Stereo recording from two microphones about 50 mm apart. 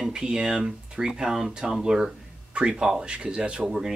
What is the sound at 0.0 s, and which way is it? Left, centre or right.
Speech, centre.